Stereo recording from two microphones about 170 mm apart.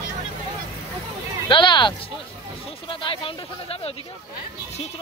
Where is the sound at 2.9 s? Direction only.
30° left (ahead or behind).